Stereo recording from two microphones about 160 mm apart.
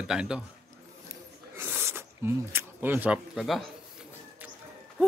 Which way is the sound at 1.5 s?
15° right (ahead or behind).